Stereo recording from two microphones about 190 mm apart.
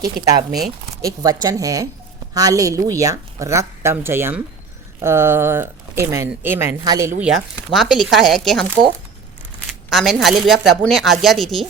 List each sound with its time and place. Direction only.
0.0 s a woman's voice: 20° right (ahead or behind)
7.2 s a woman's voice: centre (ahead or behind)
9.9 s a woman's voice: centre (ahead or behind)